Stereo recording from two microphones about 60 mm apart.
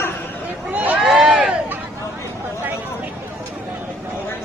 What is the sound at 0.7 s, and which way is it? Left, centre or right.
Speech, right.